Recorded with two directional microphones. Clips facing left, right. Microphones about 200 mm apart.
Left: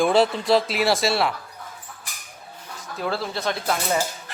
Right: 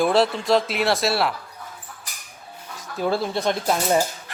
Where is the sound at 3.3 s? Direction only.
15° right (ahead or behind).